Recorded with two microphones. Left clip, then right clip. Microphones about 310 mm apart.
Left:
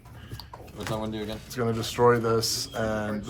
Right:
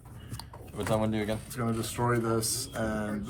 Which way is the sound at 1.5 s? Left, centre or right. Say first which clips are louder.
Left 5 dB; left.